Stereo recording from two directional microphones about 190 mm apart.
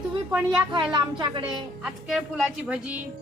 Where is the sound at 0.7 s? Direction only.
25° right (ahead or behind).